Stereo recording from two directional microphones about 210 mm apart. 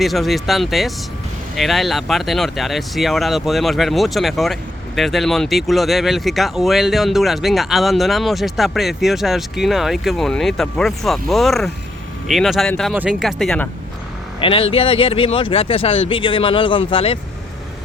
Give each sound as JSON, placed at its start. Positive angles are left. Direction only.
{"t": 0.0, "sound": "speech", "side_deg": 0}
{"t": 14.4, "sound": "speech", "side_deg": 25}